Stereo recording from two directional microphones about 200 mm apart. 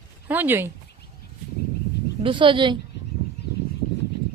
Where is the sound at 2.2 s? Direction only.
25° right (ahead or behind).